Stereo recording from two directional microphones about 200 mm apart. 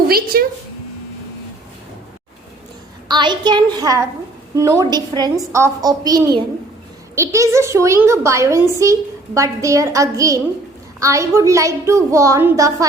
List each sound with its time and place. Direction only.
0.3 s speech: 50° right (ahead or behind)
3.1 s a woman's voice: 20° right (ahead or behind)